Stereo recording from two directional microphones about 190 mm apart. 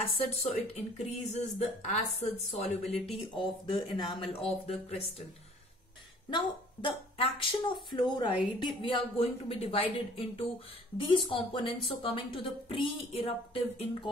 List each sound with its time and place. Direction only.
0.0 s a woman's voice: 30° left (ahead or behind)
6.3 s a woman's voice: 25° left (ahead or behind)